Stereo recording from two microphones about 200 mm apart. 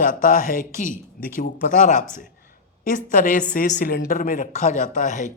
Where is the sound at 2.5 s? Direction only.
45° left (ahead or behind).